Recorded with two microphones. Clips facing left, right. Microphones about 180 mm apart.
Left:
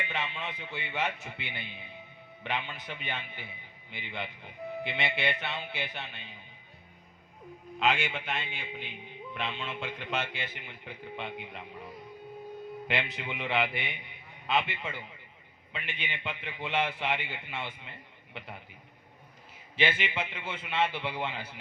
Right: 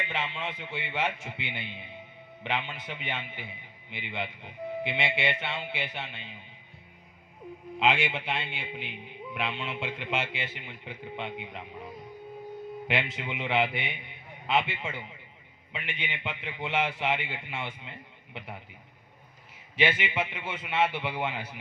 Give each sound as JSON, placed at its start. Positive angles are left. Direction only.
{"t": 0.0, "sound": "a man's voice", "side_deg": -25}
{"t": 7.8, "sound": "a man's voice", "side_deg": -20}
{"t": 9.3, "sound": "speech", "side_deg": -10}
{"t": 10.2, "sound": "a man's voice", "side_deg": -25}
{"t": 12.9, "sound": "a man's voice", "side_deg": -20}
{"t": 19.7, "sound": "a man's voice", "side_deg": -25}